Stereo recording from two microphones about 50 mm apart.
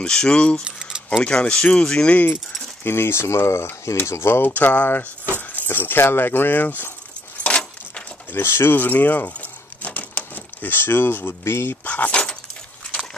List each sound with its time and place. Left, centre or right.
0.0 s speech: centre
0.7 s keys jangling: centre
1.4 s speech: centre
2.0 s speech: left
2.8 s speech: left
4.0 s speech: left
4.4 s speech: left
7.4 s keys jangling: left
8.3 s speech: left
8.7 s a sound: left
11.8 s keys jangling: left